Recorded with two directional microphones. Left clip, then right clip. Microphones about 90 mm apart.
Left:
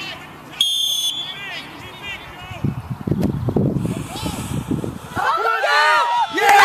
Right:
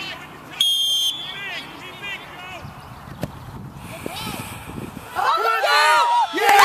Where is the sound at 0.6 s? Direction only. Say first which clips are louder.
Even; 20° left (ahead or behind).